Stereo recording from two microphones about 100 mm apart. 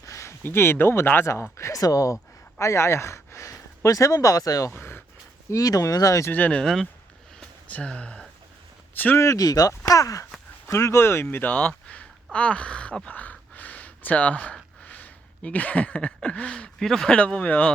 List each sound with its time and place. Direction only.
0.0 s speech: 30° left (ahead or behind)
4.7 s speech: 20° left (ahead or behind)
5.5 s speech: 35° left (ahead or behind)
6.3 s speech: 15° left (ahead or behind)
6.6 s speech: 5° left (ahead or behind)
7.3 s a sound: 10° left (ahead or behind)
9.0 s speech: 20° left (ahead or behind)
9.2 s speech: 35° left (ahead or behind); by 17.7 s 10° left (ahead or behind)